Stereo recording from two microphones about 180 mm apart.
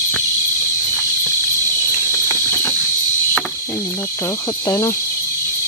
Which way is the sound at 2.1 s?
15° left (ahead or behind).